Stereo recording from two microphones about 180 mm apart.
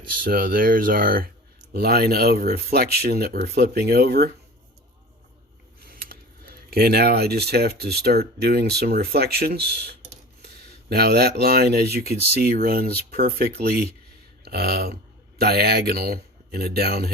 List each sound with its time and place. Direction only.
0.3 s speech: 55° right (ahead or behind)
5.9 s speech: 55° right (ahead or behind)